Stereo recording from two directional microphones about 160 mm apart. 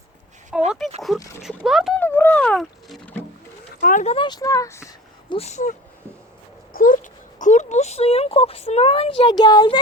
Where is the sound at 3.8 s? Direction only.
55° left (ahead or behind).